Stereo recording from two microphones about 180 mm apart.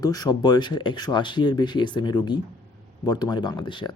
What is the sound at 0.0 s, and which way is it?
Speech, 20° left (ahead or behind).